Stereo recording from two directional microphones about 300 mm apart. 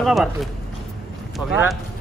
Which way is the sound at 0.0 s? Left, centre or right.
Centre.